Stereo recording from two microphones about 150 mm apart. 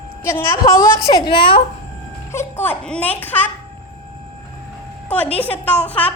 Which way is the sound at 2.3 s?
15° left (ahead or behind).